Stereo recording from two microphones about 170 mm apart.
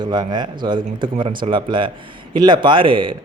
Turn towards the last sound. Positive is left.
turn(degrees=-30)  # may be behind; listen again after turning